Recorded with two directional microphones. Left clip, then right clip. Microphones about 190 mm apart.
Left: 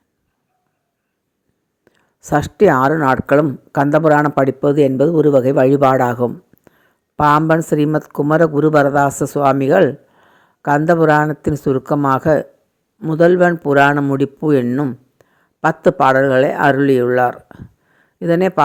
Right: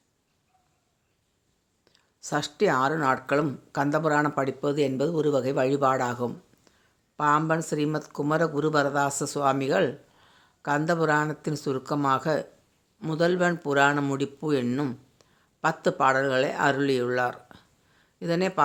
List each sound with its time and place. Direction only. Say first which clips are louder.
1.8 s speech: left 3 dB; 35° left (ahead or behind)
9.4 s speech: left 11 dB; 20° left (ahead or behind)
9.6 s a sound: left 12 dB; 30° left (ahead or behind)
10.8 s speech: left 12 dB; 30° left (ahead or behind)
15.2 s a sound: left 10 dB; 35° left (ahead or behind)
16.0 s speech: left 10 dB; 30° left (ahead or behind)